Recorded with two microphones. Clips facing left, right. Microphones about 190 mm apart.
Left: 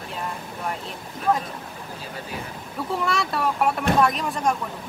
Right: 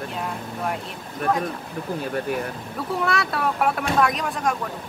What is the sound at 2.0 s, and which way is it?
Speech, 55° right (ahead or behind).